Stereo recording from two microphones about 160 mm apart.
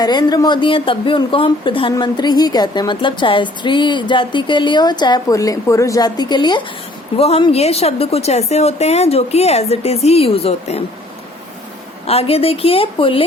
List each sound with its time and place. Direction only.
0.0 s a woman's voice: 25° left (ahead or behind)
12.0 s a woman's voice: 40° left (ahead or behind)